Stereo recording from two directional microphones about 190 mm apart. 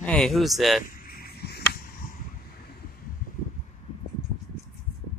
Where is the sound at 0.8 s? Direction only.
50° left (ahead or behind).